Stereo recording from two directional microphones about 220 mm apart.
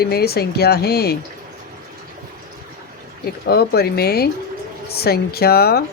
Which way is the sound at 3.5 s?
45° left (ahead or behind).